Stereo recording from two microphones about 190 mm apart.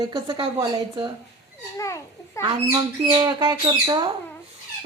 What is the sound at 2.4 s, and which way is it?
Speech, 20° right (ahead or behind).